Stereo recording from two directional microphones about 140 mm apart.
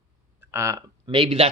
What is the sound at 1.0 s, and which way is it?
Speech, 35° right (ahead or behind).